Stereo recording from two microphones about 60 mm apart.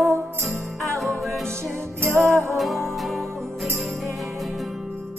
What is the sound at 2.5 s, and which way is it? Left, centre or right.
Music, centre.